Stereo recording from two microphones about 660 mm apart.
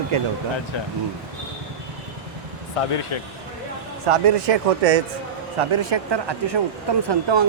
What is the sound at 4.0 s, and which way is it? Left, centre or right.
A man's voice, right.